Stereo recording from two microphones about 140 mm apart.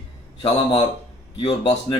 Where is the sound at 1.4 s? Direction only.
40° left (ahead or behind).